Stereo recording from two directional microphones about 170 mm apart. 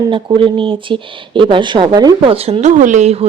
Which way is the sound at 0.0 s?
25° right (ahead or behind).